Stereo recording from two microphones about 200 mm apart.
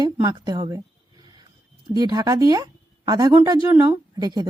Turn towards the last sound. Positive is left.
turn(degrees=-15)  # may be behind; listen again after turning